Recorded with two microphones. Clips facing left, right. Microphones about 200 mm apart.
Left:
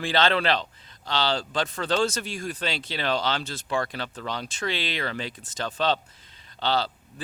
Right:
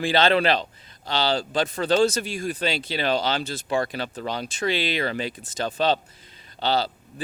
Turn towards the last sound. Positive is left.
turn(degrees=-10)  # may be behind; listen again after turning